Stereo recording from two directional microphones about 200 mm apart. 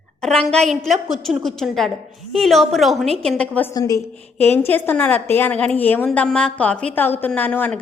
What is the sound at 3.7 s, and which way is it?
A woman's voice, 15° left (ahead or behind).